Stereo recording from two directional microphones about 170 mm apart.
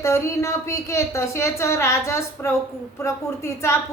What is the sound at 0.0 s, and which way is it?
A woman's voice, 15° left (ahead or behind).